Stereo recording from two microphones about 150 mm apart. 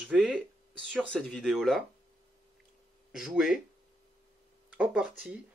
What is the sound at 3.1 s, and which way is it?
Speech, 5° right (ahead or behind).